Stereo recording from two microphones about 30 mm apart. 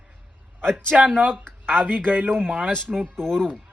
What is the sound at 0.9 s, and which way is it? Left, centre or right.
Speech, right.